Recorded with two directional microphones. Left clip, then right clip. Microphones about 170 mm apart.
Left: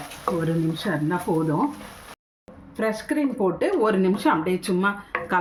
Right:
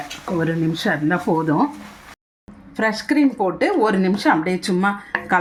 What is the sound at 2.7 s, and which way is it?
Speech, 40° right (ahead or behind).